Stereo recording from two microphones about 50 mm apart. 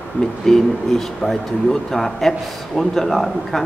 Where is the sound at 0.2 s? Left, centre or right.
Centre.